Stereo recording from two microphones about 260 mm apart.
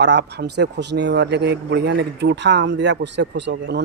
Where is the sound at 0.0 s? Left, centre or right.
Right.